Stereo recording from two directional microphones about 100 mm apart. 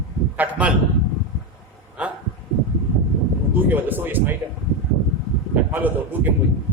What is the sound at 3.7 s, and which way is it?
Speech, 20° right (ahead or behind).